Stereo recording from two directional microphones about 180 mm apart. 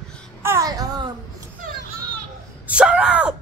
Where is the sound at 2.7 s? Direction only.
5° right (ahead or behind).